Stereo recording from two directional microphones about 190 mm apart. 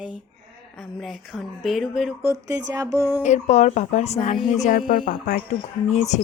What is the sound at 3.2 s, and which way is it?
Speech, 35° left (ahead or behind).